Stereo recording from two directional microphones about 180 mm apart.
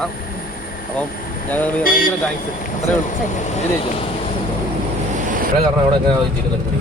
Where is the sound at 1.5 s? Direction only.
10° left (ahead or behind).